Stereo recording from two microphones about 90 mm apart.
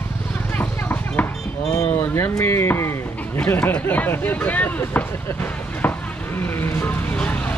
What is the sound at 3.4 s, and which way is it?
Speech, 15° left (ahead or behind).